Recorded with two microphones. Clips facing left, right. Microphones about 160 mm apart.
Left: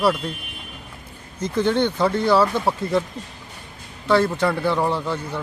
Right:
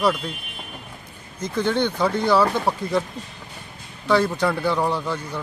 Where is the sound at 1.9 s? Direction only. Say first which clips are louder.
Even; 5° left (ahead or behind).